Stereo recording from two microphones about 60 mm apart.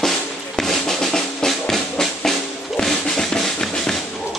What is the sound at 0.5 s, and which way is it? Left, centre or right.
Drum, centre.